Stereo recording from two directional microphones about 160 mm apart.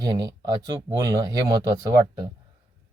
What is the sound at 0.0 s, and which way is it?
Speech, 20° right (ahead or behind).